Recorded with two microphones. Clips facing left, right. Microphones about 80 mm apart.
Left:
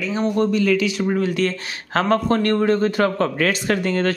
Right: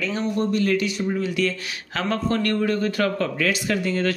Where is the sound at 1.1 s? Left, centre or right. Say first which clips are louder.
Left 3 dB; left.